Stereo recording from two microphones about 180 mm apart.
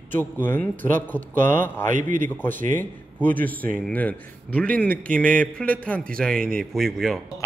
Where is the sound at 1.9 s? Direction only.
45° right (ahead or behind).